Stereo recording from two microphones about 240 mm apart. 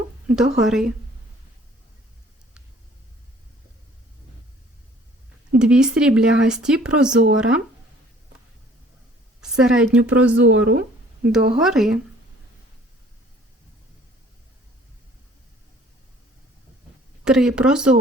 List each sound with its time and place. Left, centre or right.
0.3 s speech: centre
5.5 s speech: centre
9.4 s a woman's voice: centre
10.4 s speech: right
11.3 s speech: centre
17.2 s speech: centre